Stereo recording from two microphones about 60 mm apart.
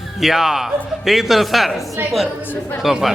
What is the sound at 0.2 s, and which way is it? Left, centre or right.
Speech, centre.